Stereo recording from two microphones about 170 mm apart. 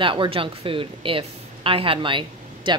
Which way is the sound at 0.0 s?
30° right (ahead or behind).